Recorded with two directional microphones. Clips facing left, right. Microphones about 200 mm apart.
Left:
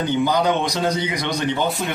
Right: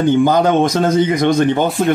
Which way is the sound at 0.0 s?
50° right (ahead or behind).